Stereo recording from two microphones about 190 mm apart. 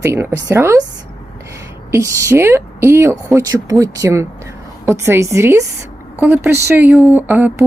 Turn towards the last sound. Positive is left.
turn(degrees=-10)  # may be behind; listen again after turning